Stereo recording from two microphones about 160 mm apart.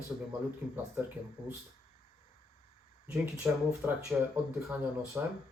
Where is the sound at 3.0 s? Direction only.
5° right (ahead or behind).